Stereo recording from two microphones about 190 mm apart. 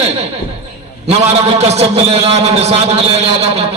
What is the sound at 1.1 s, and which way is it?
A man's voice, 30° right (ahead or behind).